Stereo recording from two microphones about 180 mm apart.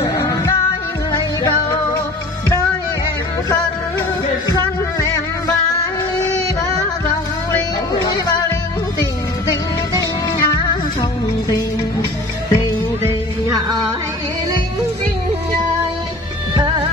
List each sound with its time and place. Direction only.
0.0 s music: 15° left (ahead or behind)
9.5 s music: 20° left (ahead or behind)
13.5 s music: 20° right (ahead or behind)